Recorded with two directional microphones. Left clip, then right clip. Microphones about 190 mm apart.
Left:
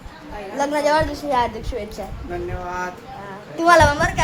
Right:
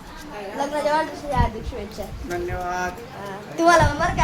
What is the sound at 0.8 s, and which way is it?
Speech, 65° left (ahead or behind).